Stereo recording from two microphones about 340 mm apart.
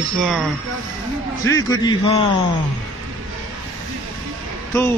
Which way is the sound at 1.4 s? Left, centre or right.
Centre.